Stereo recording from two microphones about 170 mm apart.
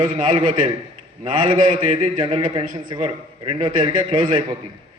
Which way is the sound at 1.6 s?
45° right (ahead or behind).